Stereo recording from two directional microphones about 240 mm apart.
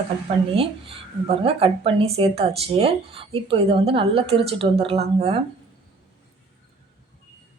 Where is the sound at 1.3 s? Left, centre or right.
Right.